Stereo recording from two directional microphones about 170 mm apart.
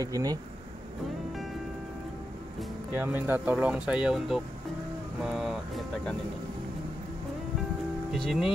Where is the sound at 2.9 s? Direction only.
10° right (ahead or behind).